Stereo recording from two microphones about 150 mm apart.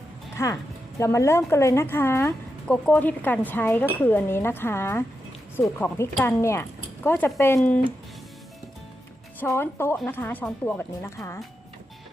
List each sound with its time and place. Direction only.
0.3 s a woman's voice: 20° left (ahead or behind)
9.4 s a woman's voice: 15° left (ahead or behind)